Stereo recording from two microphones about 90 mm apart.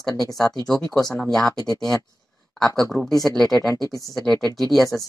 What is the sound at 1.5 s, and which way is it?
Speech, 45° left (ahead or behind).